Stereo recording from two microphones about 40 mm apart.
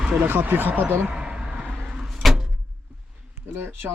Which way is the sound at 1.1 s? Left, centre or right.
Right.